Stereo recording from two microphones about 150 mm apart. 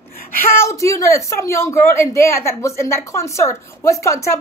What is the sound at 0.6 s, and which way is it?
A woman's voice, 20° left (ahead or behind).